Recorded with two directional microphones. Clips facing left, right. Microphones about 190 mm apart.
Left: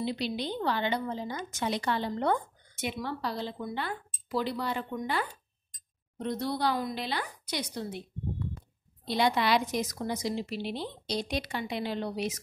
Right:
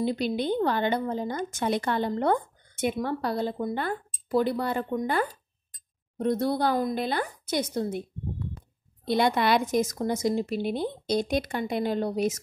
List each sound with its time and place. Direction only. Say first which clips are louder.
0.0 s a woman's voice: right 5 dB; 50° right (ahead or behind)
9.0 s a woman's voice: right 4 dB; 50° right (ahead or behind)